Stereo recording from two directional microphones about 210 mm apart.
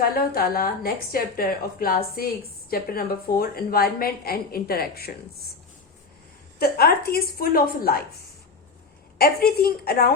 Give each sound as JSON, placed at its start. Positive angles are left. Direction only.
{"t": 0.0, "sound": "a woman's voice", "side_deg": 45}
{"t": 6.6, "sound": "a woman's voice", "side_deg": 50}